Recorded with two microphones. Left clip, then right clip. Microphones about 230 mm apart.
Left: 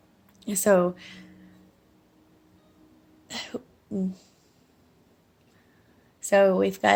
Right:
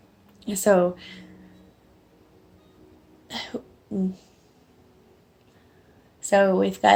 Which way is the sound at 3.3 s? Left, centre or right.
Left.